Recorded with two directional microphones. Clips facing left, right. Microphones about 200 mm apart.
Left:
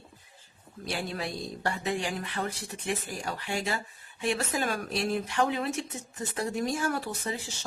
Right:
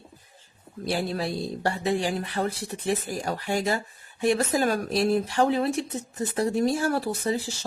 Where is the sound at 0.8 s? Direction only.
35° right (ahead or behind).